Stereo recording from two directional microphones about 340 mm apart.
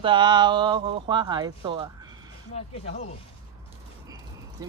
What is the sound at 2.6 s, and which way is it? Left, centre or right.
Speech, centre.